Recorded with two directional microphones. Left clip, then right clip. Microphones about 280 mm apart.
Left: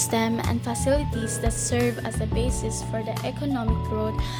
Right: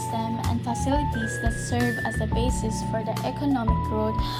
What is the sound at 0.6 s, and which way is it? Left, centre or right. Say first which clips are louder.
Speech: left 3 dB; centre.